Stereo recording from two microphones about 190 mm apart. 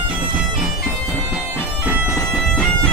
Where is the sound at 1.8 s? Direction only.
5° right (ahead or behind).